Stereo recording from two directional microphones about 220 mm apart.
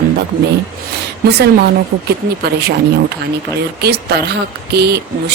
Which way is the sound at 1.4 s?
45° right (ahead or behind).